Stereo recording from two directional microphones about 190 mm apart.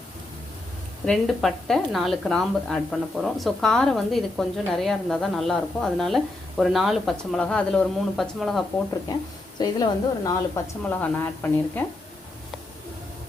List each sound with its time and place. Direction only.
1.0 s speech: centre (ahead or behind)
9.6 s a woman's voice: 20° left (ahead or behind)